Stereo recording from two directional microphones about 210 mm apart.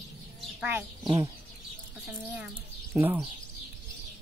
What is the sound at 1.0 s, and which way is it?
Speech, 20° right (ahead or behind).